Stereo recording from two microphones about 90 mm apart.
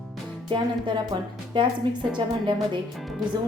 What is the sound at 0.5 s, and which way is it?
A woman's voice, 55° right (ahead or behind).